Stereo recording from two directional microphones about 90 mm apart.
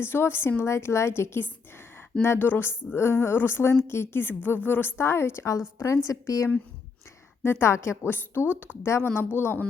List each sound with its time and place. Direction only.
0.0 s a woman's voice: 25° left (ahead or behind)